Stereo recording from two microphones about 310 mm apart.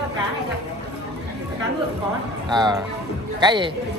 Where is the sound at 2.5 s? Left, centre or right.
Centre.